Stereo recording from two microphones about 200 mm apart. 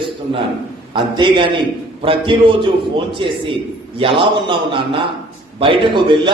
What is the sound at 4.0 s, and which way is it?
A man's voice, 25° right (ahead or behind).